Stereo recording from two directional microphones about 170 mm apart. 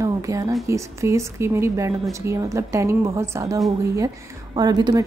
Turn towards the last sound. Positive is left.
turn(degrees=-25)  # may be behind; listen again after turning